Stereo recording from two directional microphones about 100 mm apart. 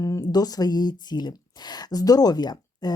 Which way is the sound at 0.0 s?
35° left (ahead or behind).